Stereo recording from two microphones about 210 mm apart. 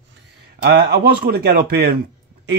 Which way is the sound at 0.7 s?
50° right (ahead or behind).